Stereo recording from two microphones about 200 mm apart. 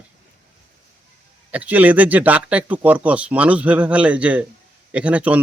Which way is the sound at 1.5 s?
10° right (ahead or behind).